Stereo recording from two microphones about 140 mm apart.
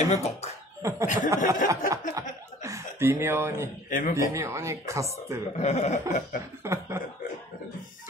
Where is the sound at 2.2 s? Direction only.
20° right (ahead or behind).